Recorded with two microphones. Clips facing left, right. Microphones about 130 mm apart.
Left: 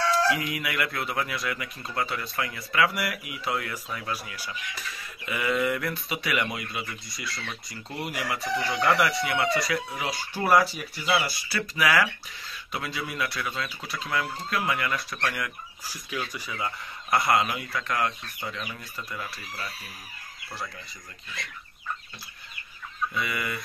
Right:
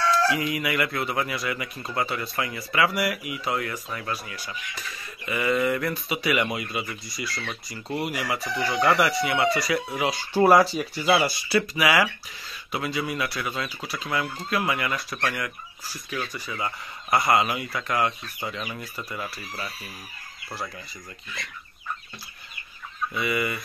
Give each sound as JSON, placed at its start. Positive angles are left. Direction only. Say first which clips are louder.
{"t": 0.3, "sound": "speech", "louder": "right 3 dB", "side_deg": 0}
{"t": 9.9, "sound": "speech", "louder": "right 8 dB", "side_deg": -25}
{"t": 15.9, "sound": "speech", "louder": "right 2 dB", "side_deg": 10}
{"t": 16.5, "sound": "speech", "louder": "right 1 dB", "side_deg": -5}
{"t": 23.1, "sound": "speech", "louder": "right 6 dB", "side_deg": -5}